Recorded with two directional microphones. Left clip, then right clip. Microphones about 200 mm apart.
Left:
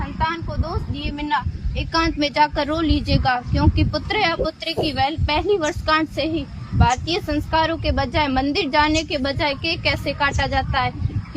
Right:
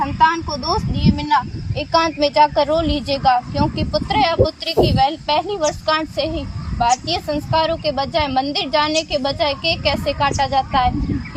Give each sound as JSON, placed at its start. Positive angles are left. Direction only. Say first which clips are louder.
{"t": 0.2, "sound": "a woman's voice", "louder": "right 7 dB", "side_deg": -40}